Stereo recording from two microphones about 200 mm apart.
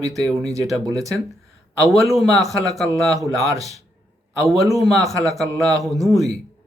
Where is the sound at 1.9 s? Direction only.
Centre (ahead or behind).